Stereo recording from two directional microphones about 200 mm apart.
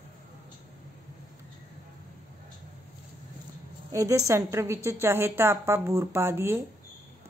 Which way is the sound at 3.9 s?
15° right (ahead or behind).